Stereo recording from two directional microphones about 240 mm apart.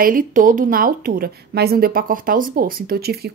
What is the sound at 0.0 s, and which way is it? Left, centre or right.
A woman's voice, right.